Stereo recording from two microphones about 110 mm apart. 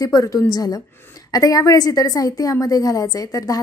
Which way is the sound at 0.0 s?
30° left (ahead or behind).